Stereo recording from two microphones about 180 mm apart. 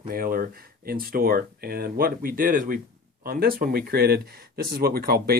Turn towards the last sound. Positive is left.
turn(degrees=-60)  # may be behind; listen again after turning